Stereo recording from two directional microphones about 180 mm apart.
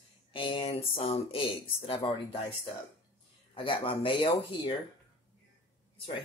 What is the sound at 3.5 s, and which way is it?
Speech, 30° left (ahead or behind).